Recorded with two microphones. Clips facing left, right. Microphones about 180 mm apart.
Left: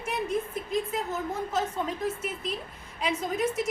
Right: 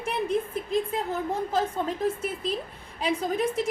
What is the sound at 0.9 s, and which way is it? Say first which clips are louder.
A woman's voice: right 3 dB; 30° right (ahead or behind).